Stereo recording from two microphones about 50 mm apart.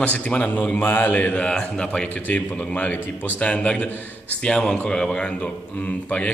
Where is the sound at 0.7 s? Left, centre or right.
Left.